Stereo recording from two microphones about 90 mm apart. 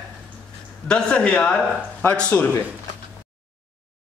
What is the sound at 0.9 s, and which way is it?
A man's voice, 10° left (ahead or behind).